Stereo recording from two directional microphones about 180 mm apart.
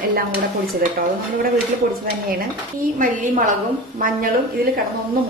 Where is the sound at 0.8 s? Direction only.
55° right (ahead or behind).